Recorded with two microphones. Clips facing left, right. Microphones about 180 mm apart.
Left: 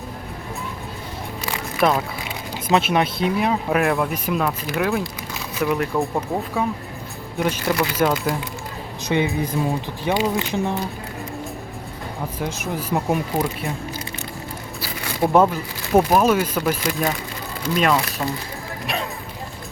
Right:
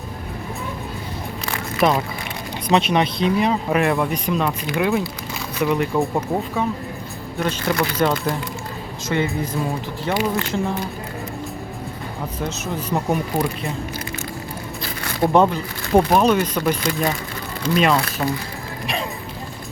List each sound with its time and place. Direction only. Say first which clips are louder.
1.8 s speech: right 1 dB; centre (ahead or behind)
9.0 s speech: left 1 dB; 15° left (ahead or behind)
12.4 s speech: even; 10° left (ahead or behind)
14.8 s speech: right 1 dB; 5° left (ahead or behind)